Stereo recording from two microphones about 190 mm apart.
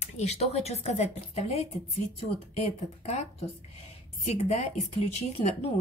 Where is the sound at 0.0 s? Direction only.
35° left (ahead or behind).